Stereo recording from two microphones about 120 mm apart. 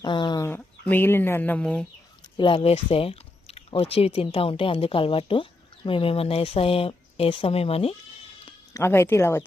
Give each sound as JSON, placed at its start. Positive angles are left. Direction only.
{"t": 0.0, "sound": "chicken", "side_deg": 35}
{"t": 0.4, "sound": "speech", "side_deg": 15}
{"t": 2.2, "sound": "a sound", "side_deg": 35}
{"t": 2.6, "sound": "speech", "side_deg": 55}
{"t": 8.7, "sound": "speech", "side_deg": 20}